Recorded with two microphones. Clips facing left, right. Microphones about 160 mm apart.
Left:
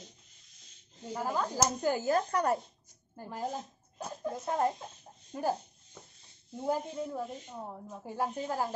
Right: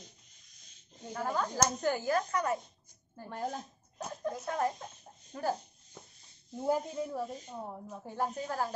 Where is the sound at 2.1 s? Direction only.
30° left (ahead or behind).